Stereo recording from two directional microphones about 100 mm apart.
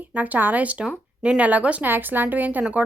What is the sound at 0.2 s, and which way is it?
A woman's voice, 15° right (ahead or behind).